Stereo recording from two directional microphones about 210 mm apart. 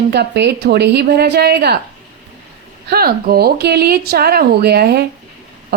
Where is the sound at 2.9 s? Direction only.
45° right (ahead or behind).